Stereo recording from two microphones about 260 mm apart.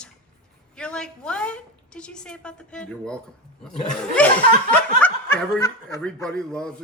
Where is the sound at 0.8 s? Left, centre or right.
Centre.